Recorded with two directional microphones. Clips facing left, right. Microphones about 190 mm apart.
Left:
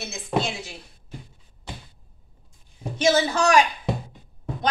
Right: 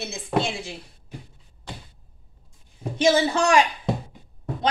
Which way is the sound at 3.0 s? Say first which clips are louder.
Right 1 dB; 30° right (ahead or behind).